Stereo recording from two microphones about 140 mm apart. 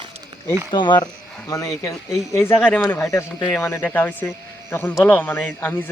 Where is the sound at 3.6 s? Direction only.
15° left (ahead or behind).